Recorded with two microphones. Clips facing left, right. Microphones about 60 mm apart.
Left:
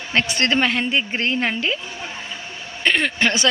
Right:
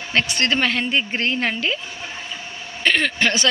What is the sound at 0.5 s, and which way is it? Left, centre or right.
Speech, centre.